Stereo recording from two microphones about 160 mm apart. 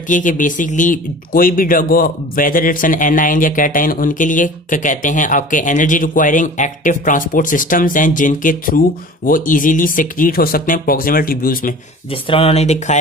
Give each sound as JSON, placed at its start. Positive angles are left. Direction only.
{"t": 0.1, "sound": "speech", "side_deg": 55}
{"t": 12.1, "sound": "speech", "side_deg": 35}